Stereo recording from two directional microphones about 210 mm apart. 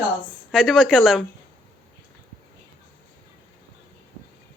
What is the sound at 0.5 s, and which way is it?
Speech, centre (ahead or behind).